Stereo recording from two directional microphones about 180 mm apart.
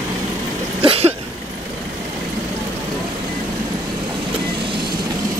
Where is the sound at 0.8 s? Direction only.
35° right (ahead or behind).